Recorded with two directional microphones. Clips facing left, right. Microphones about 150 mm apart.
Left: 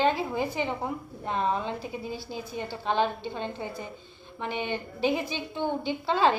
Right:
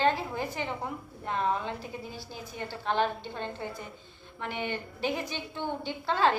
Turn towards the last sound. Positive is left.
turn(degrees=15)  # may be behind; listen again after turning